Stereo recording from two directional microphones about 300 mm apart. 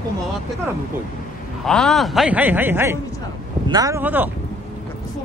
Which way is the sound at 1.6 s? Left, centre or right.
Centre.